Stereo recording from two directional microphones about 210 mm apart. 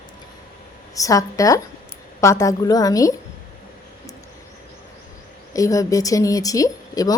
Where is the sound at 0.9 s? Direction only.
15° left (ahead or behind).